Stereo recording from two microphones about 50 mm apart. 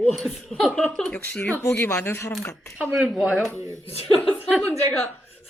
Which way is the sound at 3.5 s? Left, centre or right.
Right.